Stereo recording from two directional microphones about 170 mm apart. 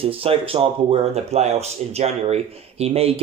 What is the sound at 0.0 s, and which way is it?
Speech, 35° right (ahead or behind).